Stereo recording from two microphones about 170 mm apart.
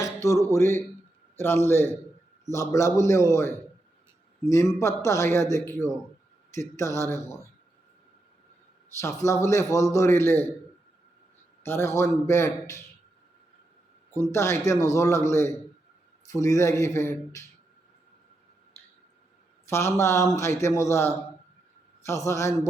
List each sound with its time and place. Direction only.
0.0 s a man's voice: 15° left (ahead or behind)
9.0 s a man's voice: 20° left (ahead or behind)
11.6 s a man's voice: 15° left (ahead or behind)
14.3 s a man's voice: 15° left (ahead or behind)
19.6 s a man's voice: 15° left (ahead or behind)